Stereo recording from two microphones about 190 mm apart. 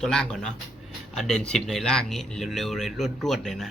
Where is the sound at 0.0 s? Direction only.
5° left (ahead or behind).